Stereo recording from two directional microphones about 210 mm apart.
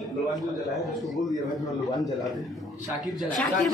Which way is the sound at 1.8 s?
15° left (ahead or behind).